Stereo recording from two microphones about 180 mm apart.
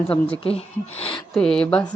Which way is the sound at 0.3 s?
35° left (ahead or behind).